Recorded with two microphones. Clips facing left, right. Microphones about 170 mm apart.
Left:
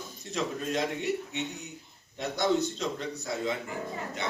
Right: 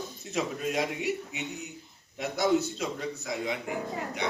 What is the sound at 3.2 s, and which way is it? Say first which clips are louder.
Speech: left 2 dB; 15° right (ahead or behind).